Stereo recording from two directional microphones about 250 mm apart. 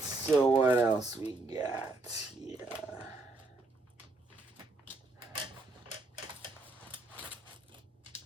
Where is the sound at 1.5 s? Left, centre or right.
Centre.